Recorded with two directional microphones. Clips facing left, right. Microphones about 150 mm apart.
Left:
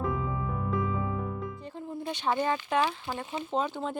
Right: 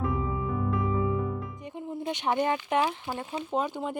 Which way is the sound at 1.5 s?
15° right (ahead or behind).